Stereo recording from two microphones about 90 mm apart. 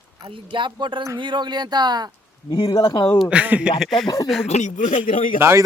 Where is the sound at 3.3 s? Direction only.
15° right (ahead or behind).